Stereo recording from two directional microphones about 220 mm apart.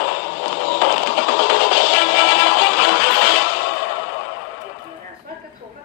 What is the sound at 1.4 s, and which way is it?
Music, 45° left (ahead or behind).